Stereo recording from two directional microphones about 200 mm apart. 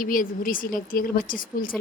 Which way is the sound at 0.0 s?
45° left (ahead or behind).